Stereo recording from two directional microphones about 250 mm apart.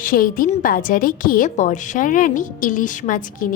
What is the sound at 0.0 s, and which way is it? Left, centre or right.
A woman's voice, left.